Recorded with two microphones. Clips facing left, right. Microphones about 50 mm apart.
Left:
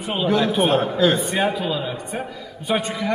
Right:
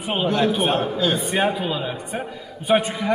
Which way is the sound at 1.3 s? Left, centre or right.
Centre.